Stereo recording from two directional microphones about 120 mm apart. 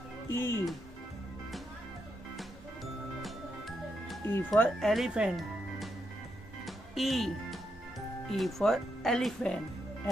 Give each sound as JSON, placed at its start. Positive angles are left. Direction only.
{"t": 0.3, "sound": "speech", "side_deg": 20}
{"t": 4.6, "sound": "speech", "side_deg": 5}
{"t": 6.6, "sound": "music", "side_deg": 0}
{"t": 8.3, "sound": "speech", "side_deg": 0}